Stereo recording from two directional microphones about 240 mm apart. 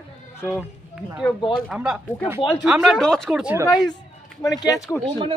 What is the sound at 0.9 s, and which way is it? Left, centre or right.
Speech, centre.